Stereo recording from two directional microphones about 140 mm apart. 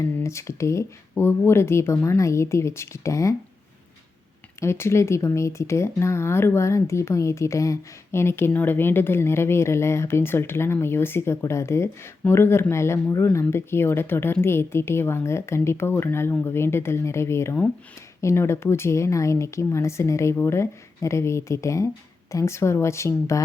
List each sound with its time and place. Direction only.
0.0 s speech: 20° left (ahead or behind)
4.6 s speech: 20° left (ahead or behind)